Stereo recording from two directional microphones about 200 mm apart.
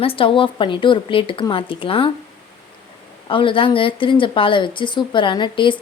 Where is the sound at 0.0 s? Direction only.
25° left (ahead or behind).